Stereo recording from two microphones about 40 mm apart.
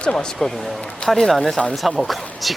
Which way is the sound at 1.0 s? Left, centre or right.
Centre.